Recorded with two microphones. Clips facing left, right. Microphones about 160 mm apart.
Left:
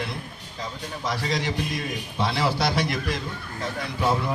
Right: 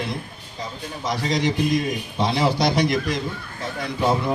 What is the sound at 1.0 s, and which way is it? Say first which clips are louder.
A man's voice: right 5 dB; 20° right (ahead or behind).